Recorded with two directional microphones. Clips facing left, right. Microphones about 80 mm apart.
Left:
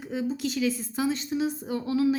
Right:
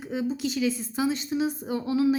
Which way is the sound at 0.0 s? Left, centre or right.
Centre.